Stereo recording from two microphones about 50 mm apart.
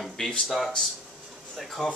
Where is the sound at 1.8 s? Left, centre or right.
Centre.